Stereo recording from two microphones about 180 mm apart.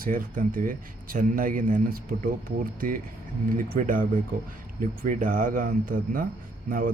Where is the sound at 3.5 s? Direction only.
50° right (ahead or behind).